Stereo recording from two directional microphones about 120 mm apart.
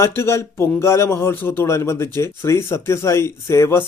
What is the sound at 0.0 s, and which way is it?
A man's voice, 25° left (ahead or behind).